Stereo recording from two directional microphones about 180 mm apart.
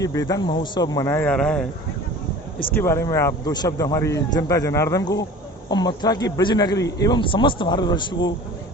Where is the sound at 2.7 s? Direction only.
15° left (ahead or behind).